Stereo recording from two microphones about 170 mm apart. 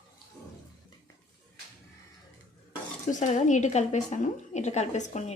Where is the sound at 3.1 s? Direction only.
45° left (ahead or behind).